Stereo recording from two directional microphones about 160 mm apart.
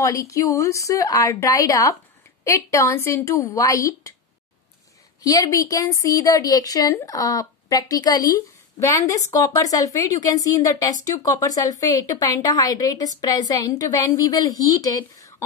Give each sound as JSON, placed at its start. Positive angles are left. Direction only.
{"t": 0.0, "sound": "a woman's voice", "side_deg": 20}
{"t": 5.2, "sound": "a woman's voice", "side_deg": 20}